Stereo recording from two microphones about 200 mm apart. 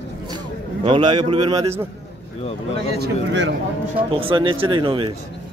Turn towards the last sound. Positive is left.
turn(degrees=-25)  # may be behind; listen again after turning